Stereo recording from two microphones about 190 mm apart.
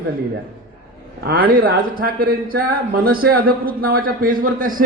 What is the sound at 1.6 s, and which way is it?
Speech, 50° right (ahead or behind).